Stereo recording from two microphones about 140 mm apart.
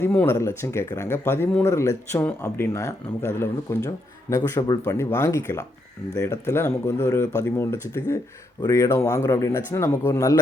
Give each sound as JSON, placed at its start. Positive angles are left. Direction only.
{"t": 0.0, "sound": "speech", "side_deg": 15}